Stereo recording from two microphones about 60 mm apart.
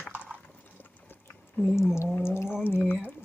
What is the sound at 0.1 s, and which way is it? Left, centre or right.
Clip-clop, right.